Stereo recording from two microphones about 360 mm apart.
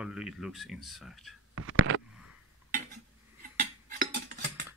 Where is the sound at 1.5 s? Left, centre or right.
Right.